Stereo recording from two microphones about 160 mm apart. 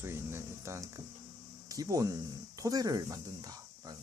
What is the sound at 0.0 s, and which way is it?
Speech, 15° right (ahead or behind).